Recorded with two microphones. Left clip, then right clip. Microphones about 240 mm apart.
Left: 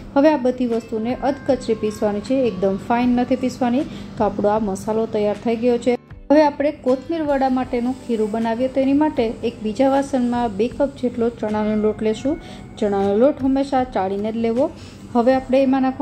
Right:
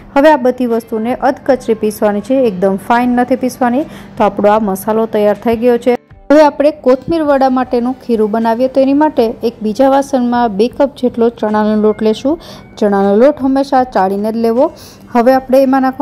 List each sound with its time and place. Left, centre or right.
0.1 s a woman's voice: centre
6.2 s a woman's voice: right